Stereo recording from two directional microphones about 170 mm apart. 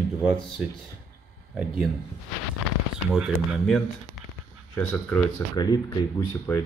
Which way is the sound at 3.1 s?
5° right (ahead or behind).